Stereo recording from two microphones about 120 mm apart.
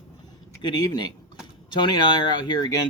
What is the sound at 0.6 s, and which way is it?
Speech, 35° left (ahead or behind).